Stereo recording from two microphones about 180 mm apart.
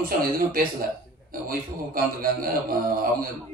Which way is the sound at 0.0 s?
55° right (ahead or behind).